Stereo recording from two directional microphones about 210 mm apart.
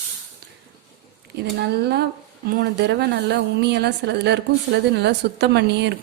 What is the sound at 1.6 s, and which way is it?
A woman's voice, 50° right (ahead or behind).